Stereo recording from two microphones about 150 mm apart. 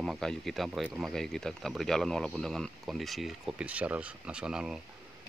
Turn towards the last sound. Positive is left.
turn(degrees=-5)  # may be behind; listen again after turning